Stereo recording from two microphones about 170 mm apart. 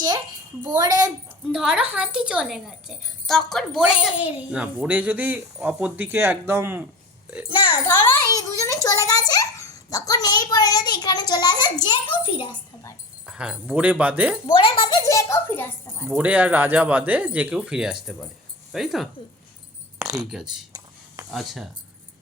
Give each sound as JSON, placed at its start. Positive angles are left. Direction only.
{"t": 0.8, "sound": "a woman's voice", "side_deg": -20}
{"t": 1.5, "sound": "a woman's voice", "side_deg": -5}
{"t": 7.5, "sound": "a child's voice", "side_deg": 25}
{"t": 13.2, "sound": "speech", "side_deg": -5}
{"t": 14.4, "sound": "a child's voice", "side_deg": 30}
{"t": 16.0, "sound": "a woman's voice", "side_deg": -10}
{"t": 20.0, "sound": "a sound", "side_deg": -20}
{"t": 20.3, "sound": "a woman's voice", "side_deg": -5}